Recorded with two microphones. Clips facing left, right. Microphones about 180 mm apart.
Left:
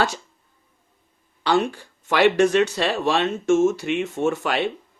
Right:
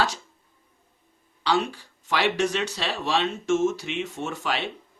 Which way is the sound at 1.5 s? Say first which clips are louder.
Left 4 dB; 50° left (ahead or behind).